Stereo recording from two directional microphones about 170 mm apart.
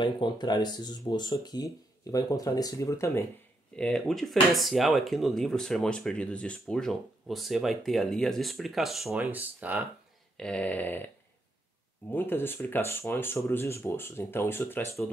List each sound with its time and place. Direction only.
0.0 s speech: 25° left (ahead or behind)
3.7 s speech: 5° left (ahead or behind)
10.3 s speech: 5° left (ahead or behind)
12.1 s speech: 10° left (ahead or behind)